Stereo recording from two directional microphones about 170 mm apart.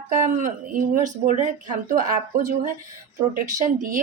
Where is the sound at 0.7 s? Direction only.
55° right (ahead or behind).